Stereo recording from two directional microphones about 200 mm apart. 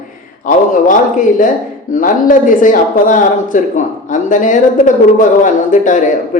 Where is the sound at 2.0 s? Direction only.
40° left (ahead or behind).